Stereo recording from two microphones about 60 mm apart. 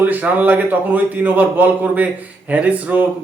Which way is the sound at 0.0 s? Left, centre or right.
Right.